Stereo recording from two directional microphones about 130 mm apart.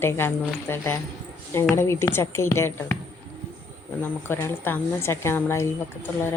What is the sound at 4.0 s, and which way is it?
A woman's voice, 15° left (ahead or behind).